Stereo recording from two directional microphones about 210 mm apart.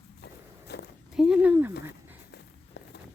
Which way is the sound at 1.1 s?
5° right (ahead or behind).